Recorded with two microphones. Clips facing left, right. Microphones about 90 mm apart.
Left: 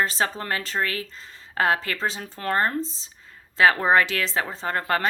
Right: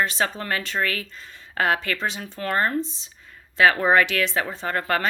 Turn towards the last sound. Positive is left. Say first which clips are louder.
# even
turn(degrees=30)  # may be behind; listen again after turning